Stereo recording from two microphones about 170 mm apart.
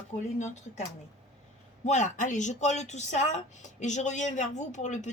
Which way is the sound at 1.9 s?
45° left (ahead or behind).